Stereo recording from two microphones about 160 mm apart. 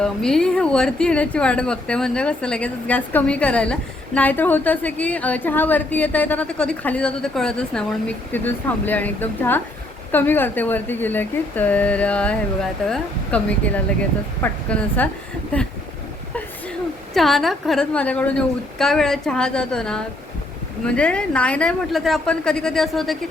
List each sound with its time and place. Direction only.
0.0 s speech: 5° left (ahead or behind)
17.2 s a woman's voice: centre (ahead or behind)